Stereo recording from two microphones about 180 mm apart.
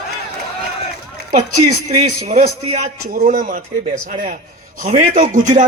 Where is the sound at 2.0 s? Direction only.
40° right (ahead or behind).